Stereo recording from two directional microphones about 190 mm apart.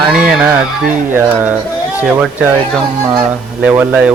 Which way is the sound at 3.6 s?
5° right (ahead or behind).